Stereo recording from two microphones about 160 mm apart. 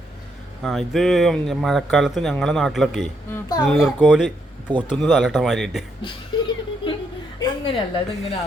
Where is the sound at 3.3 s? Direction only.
20° left (ahead or behind).